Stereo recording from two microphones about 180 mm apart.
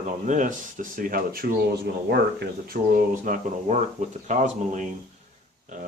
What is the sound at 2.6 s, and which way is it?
Speech, 55° right (ahead or behind).